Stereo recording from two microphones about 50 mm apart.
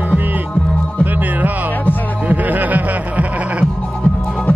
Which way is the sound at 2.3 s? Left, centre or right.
Right.